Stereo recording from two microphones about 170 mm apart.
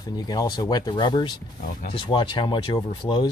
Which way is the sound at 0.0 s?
25° left (ahead or behind).